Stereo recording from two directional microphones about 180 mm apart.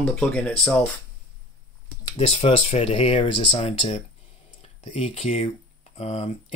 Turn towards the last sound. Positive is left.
turn(degrees=35)  # may be behind; listen again after turning